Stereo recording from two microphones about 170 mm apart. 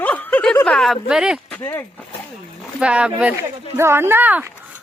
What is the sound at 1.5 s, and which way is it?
Speech, 15° left (ahead or behind).